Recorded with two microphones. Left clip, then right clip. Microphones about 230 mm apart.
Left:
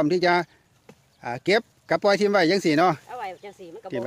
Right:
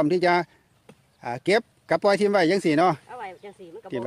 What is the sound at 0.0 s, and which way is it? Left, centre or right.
Speech, centre.